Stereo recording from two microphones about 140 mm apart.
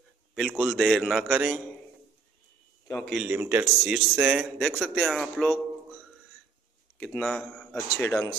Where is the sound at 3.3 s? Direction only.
15° right (ahead or behind).